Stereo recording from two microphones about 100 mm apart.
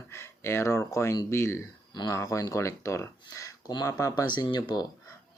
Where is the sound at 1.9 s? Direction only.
45° left (ahead or behind).